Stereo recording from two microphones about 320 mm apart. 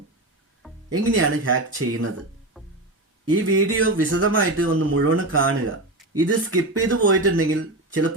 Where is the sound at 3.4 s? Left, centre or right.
Right.